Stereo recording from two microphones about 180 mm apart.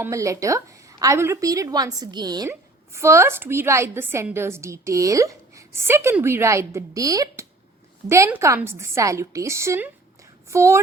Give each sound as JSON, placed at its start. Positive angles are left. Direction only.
{"t": 0.0, "sound": "a woman's voice", "side_deg": -15}